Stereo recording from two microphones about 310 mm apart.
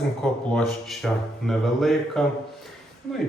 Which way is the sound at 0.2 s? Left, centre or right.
Centre.